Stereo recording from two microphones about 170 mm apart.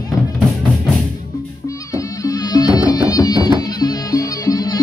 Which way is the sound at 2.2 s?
20° left (ahead or behind).